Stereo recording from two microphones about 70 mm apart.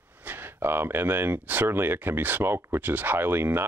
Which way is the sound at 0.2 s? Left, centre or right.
Right.